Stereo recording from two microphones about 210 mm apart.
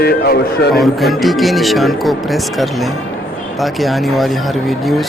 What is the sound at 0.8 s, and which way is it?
Speech, centre (ahead or behind).